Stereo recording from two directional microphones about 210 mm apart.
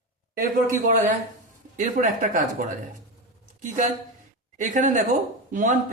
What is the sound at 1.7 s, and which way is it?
Speech, 35° right (ahead or behind).